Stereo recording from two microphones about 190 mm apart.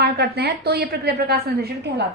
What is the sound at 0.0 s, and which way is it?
A woman's voice, 60° right (ahead or behind).